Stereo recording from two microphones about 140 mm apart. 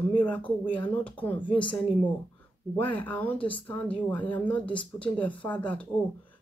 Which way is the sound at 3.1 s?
10° left (ahead or behind).